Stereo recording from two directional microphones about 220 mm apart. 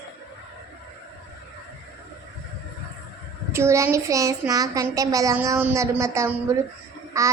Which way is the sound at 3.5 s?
10° right (ahead or behind).